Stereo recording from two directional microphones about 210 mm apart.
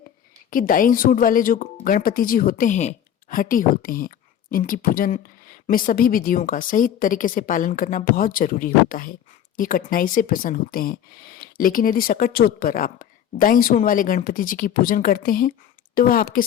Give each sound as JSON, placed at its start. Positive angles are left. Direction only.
{"t": 0.5, "sound": "a woman's voice", "side_deg": 40}